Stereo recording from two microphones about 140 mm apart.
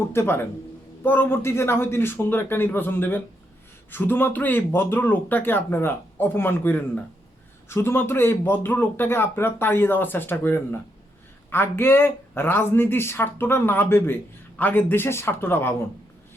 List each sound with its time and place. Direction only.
0.1 s speech: 15° left (ahead or behind)